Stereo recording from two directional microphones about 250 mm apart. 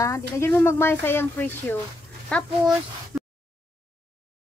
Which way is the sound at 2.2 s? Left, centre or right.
Centre.